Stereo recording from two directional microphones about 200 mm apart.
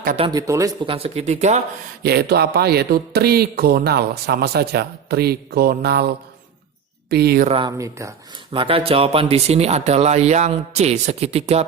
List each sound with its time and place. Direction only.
0.2 s speech: 20° right (ahead or behind)
0.9 s speech: 30° right (ahead or behind)
2.0 s a man's voice: 50° right (ahead or behind)
7.1 s a man's voice: 50° right (ahead or behind)
7.4 s speech: 25° right (ahead or behind)
7.8 s speech: 15° right (ahead or behind)
8.5 s speech: 25° right (ahead or behind)